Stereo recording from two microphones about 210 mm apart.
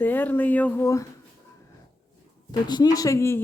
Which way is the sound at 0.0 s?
10° left (ahead or behind).